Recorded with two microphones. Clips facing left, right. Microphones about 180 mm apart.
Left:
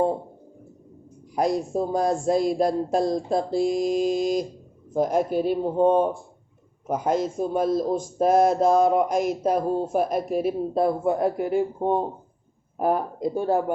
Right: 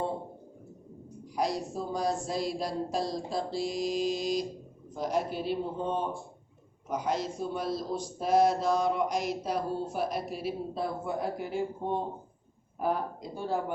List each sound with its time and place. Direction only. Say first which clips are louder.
1.4 s a man's voice: left 8 dB; 50° left (ahead or behind)